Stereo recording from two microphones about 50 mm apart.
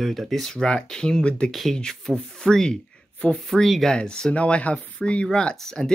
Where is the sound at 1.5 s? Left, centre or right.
Centre.